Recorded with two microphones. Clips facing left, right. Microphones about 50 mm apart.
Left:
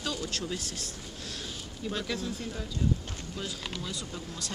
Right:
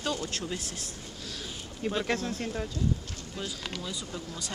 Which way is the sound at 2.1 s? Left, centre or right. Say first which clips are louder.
Right 4 dB; right.